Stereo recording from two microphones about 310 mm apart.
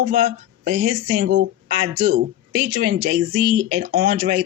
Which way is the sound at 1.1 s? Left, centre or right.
Right.